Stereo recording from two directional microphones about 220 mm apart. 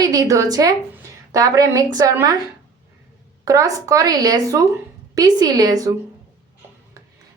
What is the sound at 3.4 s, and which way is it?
A woman's voice, 15° right (ahead or behind).